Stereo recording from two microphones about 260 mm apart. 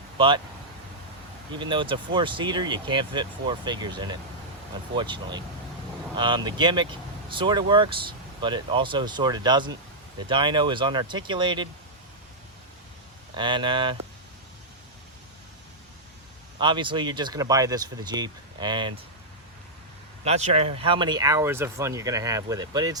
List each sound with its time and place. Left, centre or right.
0.2 s speech: centre
1.5 s speech: centre
13.3 s speech: centre
16.6 s speech: centre
20.2 s speech: right